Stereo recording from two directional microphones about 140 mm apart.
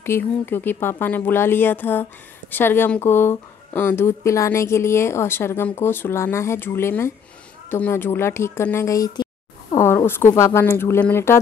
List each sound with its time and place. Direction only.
0.0 s speech: 15° left (ahead or behind); by 9.8 s 30° left (ahead or behind)
9.8 s speech: 20° left (ahead or behind)